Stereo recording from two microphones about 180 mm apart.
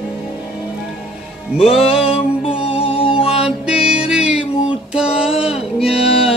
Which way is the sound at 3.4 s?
5° right (ahead or behind).